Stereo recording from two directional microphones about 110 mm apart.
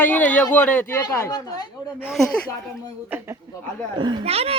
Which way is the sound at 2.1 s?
5° left (ahead or behind).